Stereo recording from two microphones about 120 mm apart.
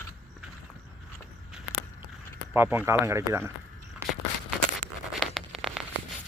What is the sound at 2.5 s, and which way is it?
Speech, 15° right (ahead or behind).